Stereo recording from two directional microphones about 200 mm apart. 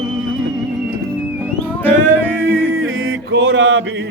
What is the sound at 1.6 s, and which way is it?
Music, 10° left (ahead or behind).